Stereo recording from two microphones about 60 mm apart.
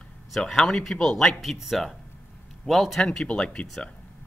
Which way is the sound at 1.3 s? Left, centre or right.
Centre.